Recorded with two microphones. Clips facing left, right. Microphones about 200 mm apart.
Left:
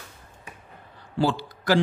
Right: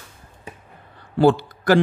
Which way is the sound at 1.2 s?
55° right (ahead or behind).